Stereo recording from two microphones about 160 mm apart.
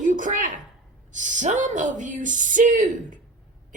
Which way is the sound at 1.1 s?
50° right (ahead or behind).